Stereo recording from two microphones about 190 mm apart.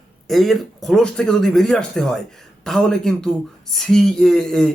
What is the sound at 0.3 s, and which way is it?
Speech, centre (ahead or behind).